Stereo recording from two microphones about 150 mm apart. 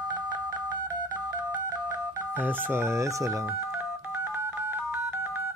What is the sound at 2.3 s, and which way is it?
Speech, 10° right (ahead or behind).